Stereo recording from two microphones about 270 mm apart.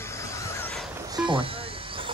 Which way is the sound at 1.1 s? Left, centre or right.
Centre.